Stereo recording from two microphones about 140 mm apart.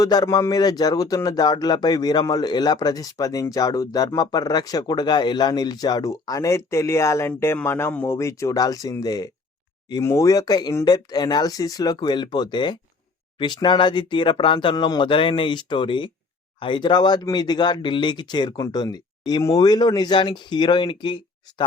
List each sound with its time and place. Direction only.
0.0 s a man's voice: 25° left (ahead or behind)